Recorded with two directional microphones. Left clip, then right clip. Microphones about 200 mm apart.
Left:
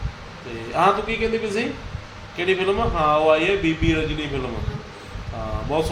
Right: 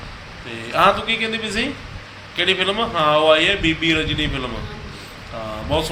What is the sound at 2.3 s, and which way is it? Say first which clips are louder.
A man's voice: right 2 dB; 10° right (ahead or behind).